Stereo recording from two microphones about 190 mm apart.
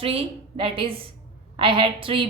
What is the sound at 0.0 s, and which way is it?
A woman's voice, 30° right (ahead or behind).